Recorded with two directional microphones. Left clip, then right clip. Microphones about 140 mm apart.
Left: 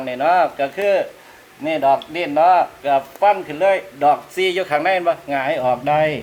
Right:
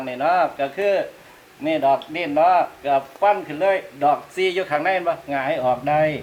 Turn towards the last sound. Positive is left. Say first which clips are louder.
# left 2 dB
turn(degrees=45)  # may be behind; listen again after turning